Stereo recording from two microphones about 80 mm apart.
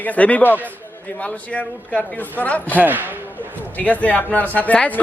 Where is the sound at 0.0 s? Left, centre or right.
Centre.